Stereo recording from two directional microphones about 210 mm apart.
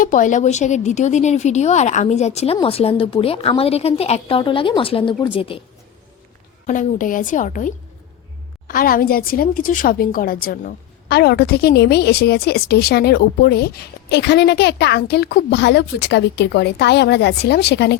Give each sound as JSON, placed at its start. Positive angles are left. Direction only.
{"t": 0.0, "sound": "speech", "side_deg": 40}
{"t": 6.7, "sound": "a woman's voice", "side_deg": 40}